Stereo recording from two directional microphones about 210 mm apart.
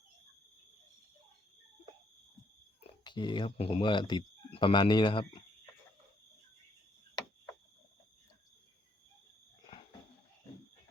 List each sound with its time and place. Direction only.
2.8 s speech: 20° left (ahead or behind)